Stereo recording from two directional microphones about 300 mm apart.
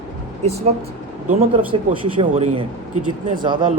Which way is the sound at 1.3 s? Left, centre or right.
Right.